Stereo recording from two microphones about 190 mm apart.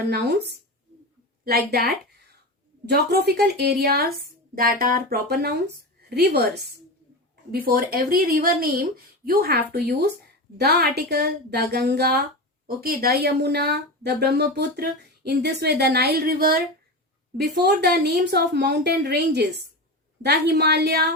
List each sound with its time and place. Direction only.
0.0 s speech: 60° right (ahead or behind)